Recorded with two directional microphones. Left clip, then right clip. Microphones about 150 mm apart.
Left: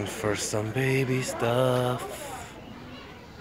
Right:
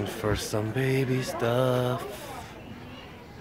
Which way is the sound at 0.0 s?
20° right (ahead or behind).